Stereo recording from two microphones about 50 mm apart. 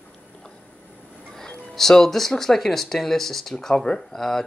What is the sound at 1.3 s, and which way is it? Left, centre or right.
Speech, centre.